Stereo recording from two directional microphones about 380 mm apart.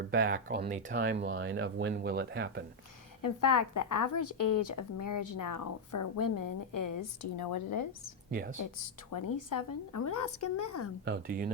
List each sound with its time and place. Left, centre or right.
0.1 s speech: right
3.2 s a woman's voice: left
7.3 s a woman's voice: left
8.3 s speech: right
9.0 s a woman's voice: left
11.0 s speech: right